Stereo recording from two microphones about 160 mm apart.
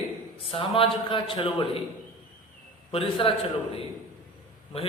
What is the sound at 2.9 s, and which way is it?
Speech, 35° left (ahead or behind).